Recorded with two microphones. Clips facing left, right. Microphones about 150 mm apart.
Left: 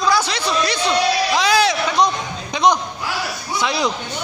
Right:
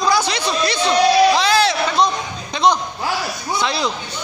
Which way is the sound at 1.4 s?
10° left (ahead or behind).